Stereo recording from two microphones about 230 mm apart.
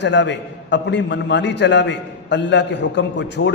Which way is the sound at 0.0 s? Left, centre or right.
Left.